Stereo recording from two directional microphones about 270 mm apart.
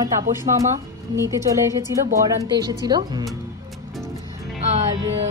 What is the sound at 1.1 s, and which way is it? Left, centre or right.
Speech, centre.